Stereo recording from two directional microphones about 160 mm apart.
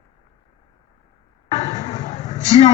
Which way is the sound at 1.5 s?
50° left (ahead or behind).